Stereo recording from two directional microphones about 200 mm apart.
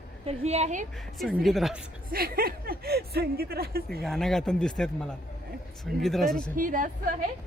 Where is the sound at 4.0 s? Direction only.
Centre (ahead or behind).